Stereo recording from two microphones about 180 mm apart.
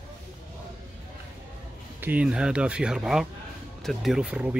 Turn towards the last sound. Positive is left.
turn(degrees=-5)  # may be behind; listen again after turning